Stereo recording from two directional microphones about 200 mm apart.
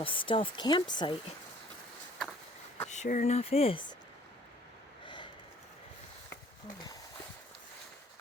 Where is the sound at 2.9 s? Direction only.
40° left (ahead or behind).